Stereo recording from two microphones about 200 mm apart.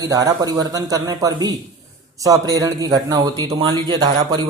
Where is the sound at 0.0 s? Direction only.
20° right (ahead or behind).